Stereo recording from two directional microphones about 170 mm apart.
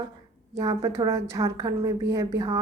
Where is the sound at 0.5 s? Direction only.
20° right (ahead or behind).